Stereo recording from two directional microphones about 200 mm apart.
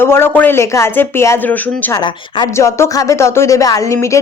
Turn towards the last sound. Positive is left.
turn(degrees=15)  # may be behind; listen again after turning